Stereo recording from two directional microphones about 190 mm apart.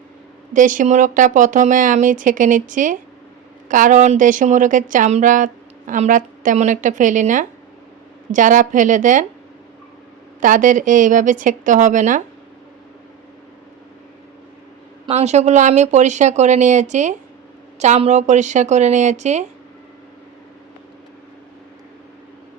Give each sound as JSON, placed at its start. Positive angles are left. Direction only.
{"t": 0.5, "sound": "a woman's voice", "side_deg": -45}
{"t": 10.4, "sound": "a woman's voice", "side_deg": -45}
{"t": 15.0, "sound": "speech", "side_deg": -35}